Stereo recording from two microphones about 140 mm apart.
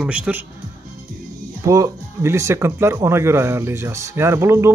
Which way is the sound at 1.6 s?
25° right (ahead or behind).